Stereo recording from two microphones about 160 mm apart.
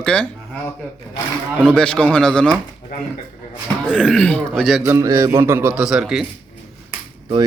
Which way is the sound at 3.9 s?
5° left (ahead or behind).